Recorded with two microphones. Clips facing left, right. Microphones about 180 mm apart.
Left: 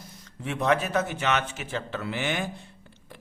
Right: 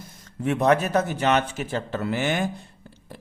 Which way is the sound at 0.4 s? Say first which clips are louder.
Right 5 dB; 45° right (ahead or behind).